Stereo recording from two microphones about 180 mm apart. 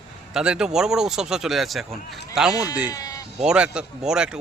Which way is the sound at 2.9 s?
20° left (ahead or behind).